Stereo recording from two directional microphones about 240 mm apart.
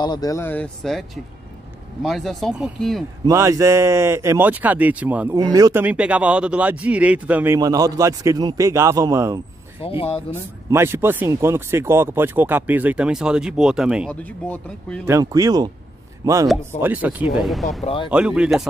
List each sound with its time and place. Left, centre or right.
0.0 s speech: centre
3.3 s speech: centre
9.8 s speech: left
10.7 s speech: centre
15.0 s speech: centre
17.8 s speech: left
18.1 s speech: centre